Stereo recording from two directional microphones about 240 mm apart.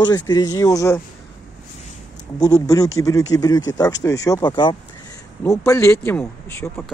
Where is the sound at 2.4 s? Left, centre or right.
Centre.